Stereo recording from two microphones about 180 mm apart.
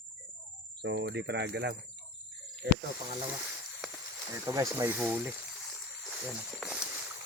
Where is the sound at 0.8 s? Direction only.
70° right (ahead or behind).